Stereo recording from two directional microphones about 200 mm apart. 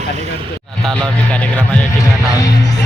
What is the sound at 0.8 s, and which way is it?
Speech, 5° left (ahead or behind).